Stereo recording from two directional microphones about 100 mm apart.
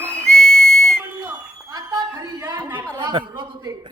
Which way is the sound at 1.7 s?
40° right (ahead or behind).